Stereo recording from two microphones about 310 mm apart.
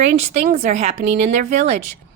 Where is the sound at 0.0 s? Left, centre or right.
Right.